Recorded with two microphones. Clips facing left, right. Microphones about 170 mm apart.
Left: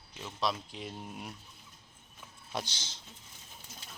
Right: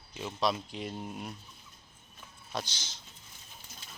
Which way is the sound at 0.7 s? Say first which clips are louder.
Right 4 dB; centre (ahead or behind).